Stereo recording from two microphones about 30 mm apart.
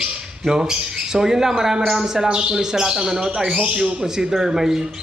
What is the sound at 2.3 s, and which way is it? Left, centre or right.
Speech, right.